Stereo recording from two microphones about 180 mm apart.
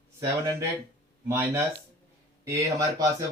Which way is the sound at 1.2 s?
15° right (ahead or behind).